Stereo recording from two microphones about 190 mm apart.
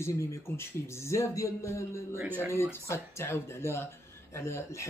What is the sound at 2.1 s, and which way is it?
Speech, 10° right (ahead or behind).